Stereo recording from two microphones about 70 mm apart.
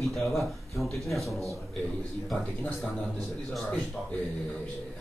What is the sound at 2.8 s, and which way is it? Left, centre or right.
Speech, centre.